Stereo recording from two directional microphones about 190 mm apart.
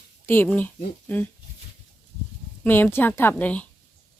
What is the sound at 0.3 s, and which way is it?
Speech, 10° left (ahead or behind).